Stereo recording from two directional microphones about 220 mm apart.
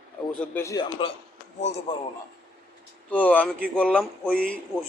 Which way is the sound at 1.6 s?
30° left (ahead or behind).